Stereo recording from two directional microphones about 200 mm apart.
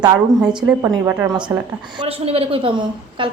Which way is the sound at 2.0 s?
30° right (ahead or behind).